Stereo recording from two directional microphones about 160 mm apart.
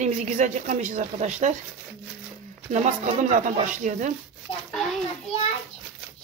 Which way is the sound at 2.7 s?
50° right (ahead or behind).